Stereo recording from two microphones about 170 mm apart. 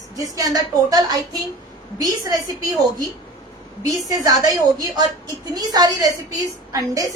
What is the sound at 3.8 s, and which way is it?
A woman's voice, 20° right (ahead or behind).